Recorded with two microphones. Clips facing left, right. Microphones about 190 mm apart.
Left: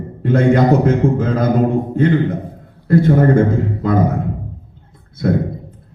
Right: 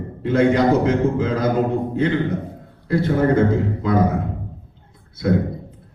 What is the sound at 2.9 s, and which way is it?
Speech, 50° left (ahead or behind).